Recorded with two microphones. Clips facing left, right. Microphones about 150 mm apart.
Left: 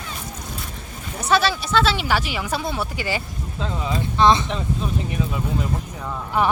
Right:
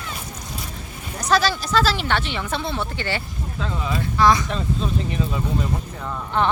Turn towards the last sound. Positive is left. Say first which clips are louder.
# even
turn(degrees=10)  # may be behind; listen again after turning